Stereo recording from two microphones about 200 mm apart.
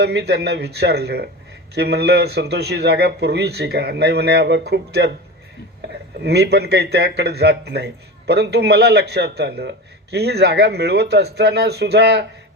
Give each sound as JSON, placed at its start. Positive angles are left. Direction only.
{"t": 0.0, "sound": "a man's voice", "side_deg": -55}
{"t": 6.2, "sound": "a man's voice", "side_deg": -55}